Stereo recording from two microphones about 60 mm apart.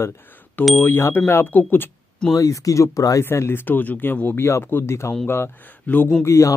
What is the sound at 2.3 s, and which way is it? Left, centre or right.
Speech, left.